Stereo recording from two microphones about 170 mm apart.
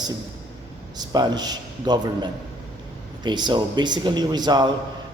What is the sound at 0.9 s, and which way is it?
A man's voice, 25° right (ahead or behind).